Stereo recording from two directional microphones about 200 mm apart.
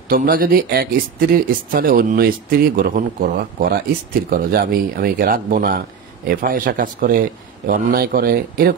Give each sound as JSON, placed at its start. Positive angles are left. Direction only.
{"t": 0.1, "sound": "speech", "side_deg": -45}